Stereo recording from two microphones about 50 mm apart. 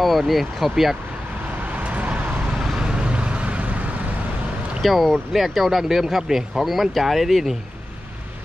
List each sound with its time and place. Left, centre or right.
0.3 s speech: centre
1.7 s vehicle: right
4.8 s speech: centre